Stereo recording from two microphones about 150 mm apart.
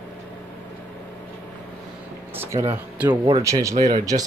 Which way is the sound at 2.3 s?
15° right (ahead or behind).